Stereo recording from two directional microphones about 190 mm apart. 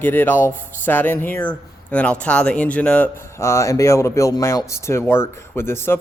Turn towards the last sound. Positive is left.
turn(degrees=10)  # may be behind; listen again after turning